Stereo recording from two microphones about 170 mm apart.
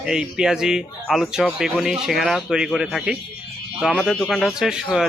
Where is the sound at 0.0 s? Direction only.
5° right (ahead or behind).